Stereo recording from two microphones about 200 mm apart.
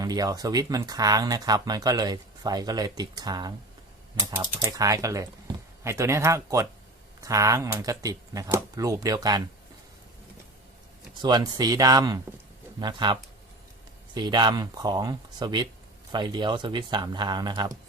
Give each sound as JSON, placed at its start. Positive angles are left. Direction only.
{"t": 0.0, "sound": "speech", "side_deg": -20}
{"t": 11.2, "sound": "speech", "side_deg": -20}